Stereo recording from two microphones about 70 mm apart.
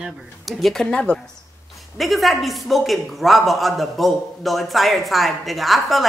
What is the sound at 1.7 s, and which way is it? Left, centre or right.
Speech, centre.